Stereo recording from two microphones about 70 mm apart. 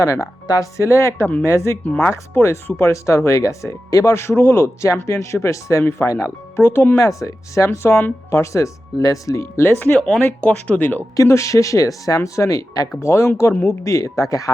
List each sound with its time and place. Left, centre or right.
0.0 s speech: left
4.1 s speech: left
6.6 s speech: left
7.0 s speech: left
8.3 s speech: left
9.9 s speech: centre; by 11.0 s left
11.2 s speech: left
13.0 s speech: left